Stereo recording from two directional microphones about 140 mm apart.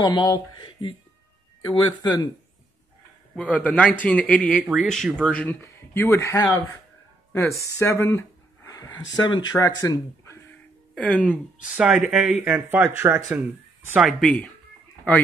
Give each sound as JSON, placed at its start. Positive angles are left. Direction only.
{"t": 0.0, "sound": "speech", "side_deg": 30}
{"t": 3.4, "sound": "a man's voice", "side_deg": 10}
{"t": 4.6, "sound": "speech", "side_deg": -10}
{"t": 4.8, "sound": "speech", "side_deg": 5}
{"t": 11.0, "sound": "a man's voice", "side_deg": 10}
{"t": 11.6, "sound": "speech", "side_deg": -5}
{"t": 13.9, "sound": "speech", "side_deg": 0}